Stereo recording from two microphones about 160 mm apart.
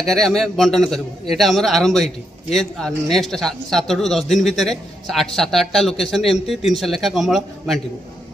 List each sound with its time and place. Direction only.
0.0 s speech: centre (ahead or behind)